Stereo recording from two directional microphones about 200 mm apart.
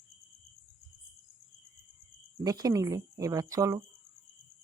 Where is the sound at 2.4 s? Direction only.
20° right (ahead or behind).